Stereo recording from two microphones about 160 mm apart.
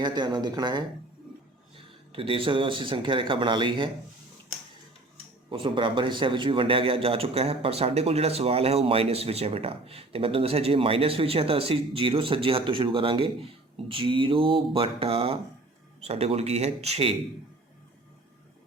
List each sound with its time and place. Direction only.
0.0 s speech: 25° right (ahead or behind)
2.1 s a man's voice: 35° right (ahead or behind)
5.5 s a man's voice: 30° right (ahead or behind)